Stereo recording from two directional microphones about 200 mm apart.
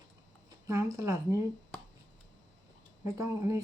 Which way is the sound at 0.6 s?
15° right (ahead or behind).